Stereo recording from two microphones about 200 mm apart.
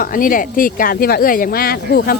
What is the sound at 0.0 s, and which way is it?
Speech, 45° left (ahead or behind).